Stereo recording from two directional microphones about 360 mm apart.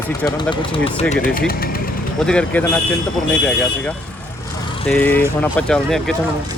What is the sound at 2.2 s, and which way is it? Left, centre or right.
Speech, centre.